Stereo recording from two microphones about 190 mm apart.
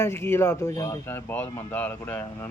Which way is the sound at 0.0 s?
15° left (ahead or behind).